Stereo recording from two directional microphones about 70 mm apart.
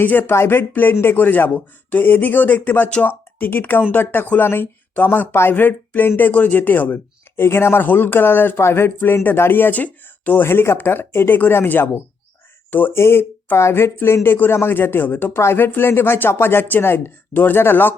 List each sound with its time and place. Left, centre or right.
0.0 s speech: left